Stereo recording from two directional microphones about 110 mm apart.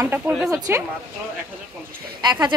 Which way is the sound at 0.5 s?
25° right (ahead or behind).